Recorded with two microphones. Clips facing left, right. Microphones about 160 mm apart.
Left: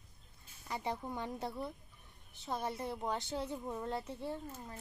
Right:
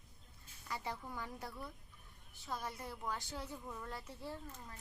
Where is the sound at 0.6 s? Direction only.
20° left (ahead or behind).